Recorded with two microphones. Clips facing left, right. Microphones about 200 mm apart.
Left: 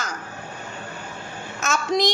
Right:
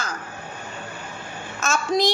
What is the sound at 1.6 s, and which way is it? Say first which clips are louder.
Speech: even; 15° left (ahead or behind).